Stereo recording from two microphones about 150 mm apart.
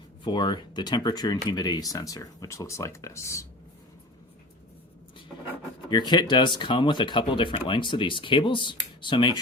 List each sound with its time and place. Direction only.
0.3 s speech: 30° left (ahead or behind)
5.9 s speech: 30° left (ahead or behind)